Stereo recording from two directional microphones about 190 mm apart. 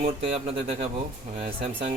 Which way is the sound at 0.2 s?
30° right (ahead or behind).